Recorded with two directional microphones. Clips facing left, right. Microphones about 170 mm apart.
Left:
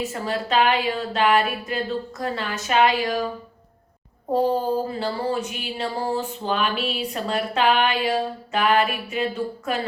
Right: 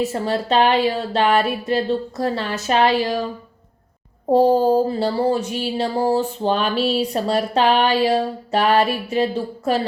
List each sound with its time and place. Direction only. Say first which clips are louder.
0.0 s speech: right 5 dB; 30° right (ahead or behind)
4.3 s speech: right 7 dB; 35° right (ahead or behind)